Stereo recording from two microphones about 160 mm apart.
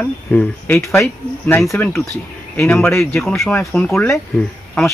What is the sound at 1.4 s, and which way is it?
Speech, centre (ahead or behind).